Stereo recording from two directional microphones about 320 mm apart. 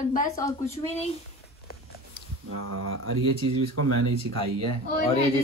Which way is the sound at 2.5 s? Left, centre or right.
Right.